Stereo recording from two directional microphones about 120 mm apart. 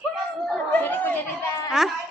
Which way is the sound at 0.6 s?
15° left (ahead or behind).